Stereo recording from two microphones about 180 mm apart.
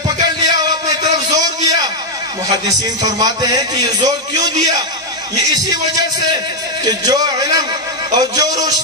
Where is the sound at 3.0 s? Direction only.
20° right (ahead or behind).